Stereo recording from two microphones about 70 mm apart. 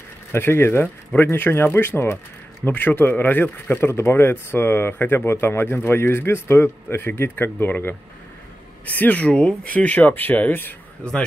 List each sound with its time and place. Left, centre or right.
0.3 s a man's voice: left